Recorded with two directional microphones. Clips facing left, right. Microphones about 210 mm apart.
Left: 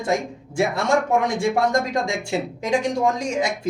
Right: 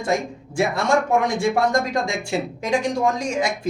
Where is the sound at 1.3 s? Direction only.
20° left (ahead or behind).